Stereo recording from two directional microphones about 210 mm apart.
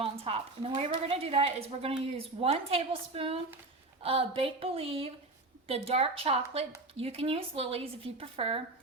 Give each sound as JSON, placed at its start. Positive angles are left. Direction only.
{"t": 0.0, "sound": "a woman's voice", "side_deg": -25}